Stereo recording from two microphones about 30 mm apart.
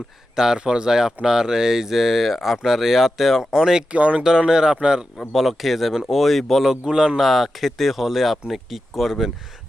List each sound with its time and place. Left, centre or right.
0.5 s speech: right; by 3.4 s centre
3.4 s speech: centre
3.9 s speech: right
4.2 s speech: right
5.3 s speech: centre
6.8 s speech: right
7.2 s speech: centre